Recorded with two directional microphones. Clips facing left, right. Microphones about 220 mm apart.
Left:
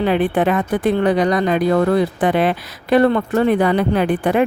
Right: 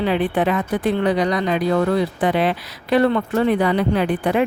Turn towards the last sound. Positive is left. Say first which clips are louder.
# left 2 dB
turn(degrees=50)  # may be behind; listen again after turning